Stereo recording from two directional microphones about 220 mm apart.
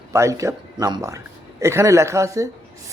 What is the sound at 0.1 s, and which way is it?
Speech, 15° right (ahead or behind).